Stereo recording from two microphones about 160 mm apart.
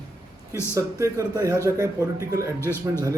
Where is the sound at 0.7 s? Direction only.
20° right (ahead or behind).